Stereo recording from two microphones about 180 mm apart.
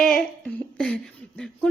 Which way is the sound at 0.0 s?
Centre (ahead or behind).